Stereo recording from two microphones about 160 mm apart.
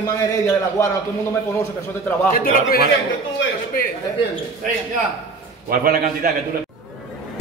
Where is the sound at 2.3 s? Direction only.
65° left (ahead or behind).